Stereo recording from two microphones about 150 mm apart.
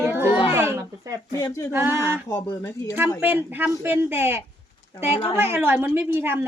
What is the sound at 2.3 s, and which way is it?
Speech, 20° left (ahead or behind).